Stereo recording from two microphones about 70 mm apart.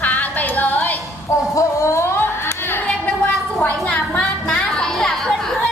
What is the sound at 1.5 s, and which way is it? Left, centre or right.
Music, left.